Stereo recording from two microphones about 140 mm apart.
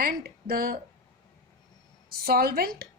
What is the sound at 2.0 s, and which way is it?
Speech, 90° right.